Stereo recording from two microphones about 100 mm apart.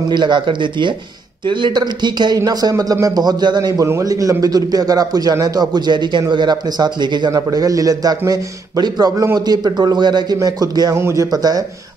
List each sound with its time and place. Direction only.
0.1 s speech: 50° right (ahead or behind)
3.7 s a man's voice: 30° right (ahead or behind)
11.0 s speech: 25° right (ahead or behind)
11.3 s a man's voice: 40° right (ahead or behind)